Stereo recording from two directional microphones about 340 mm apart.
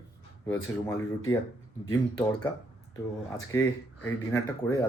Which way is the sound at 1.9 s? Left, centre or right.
Centre.